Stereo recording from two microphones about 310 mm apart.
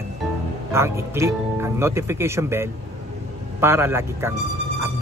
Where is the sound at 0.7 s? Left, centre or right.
Centre.